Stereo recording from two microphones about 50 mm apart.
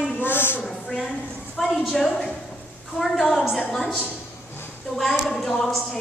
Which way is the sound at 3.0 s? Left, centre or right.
Centre.